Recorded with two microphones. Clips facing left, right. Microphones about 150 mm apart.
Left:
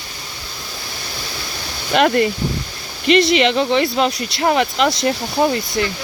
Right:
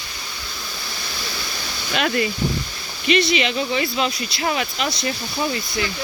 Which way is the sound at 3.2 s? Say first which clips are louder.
Left 8 dB; 70° left (ahead or behind).